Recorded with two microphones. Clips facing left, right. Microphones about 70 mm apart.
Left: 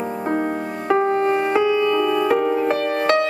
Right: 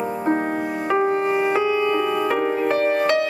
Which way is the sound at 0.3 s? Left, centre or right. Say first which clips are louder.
Right 1 dB; right.